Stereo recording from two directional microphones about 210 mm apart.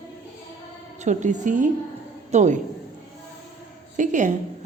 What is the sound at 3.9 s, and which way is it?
Speech, 35° right (ahead or behind).